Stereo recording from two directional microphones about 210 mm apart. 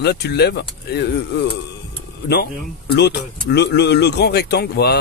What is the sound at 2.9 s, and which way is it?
Speech, 50° left (ahead or behind).